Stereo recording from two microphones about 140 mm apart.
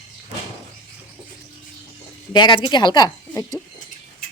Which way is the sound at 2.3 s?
30° left (ahead or behind).